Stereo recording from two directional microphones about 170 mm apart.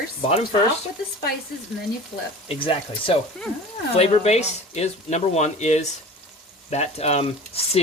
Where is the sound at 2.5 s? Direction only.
30° left (ahead or behind).